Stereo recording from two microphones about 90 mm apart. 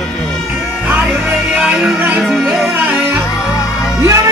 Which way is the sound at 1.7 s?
20° right (ahead or behind).